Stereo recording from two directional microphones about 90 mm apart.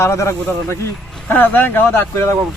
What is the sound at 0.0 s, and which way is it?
Speech, 35° left (ahead or behind).